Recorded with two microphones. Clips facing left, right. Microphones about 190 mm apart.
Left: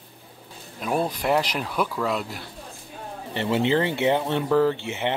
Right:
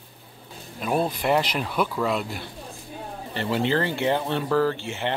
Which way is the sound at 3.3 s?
20° left (ahead or behind).